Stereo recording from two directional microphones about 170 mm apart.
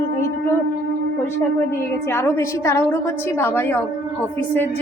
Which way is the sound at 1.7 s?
15° left (ahead or behind).